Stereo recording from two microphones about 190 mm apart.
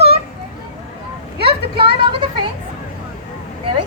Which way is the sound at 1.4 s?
30° right (ahead or behind).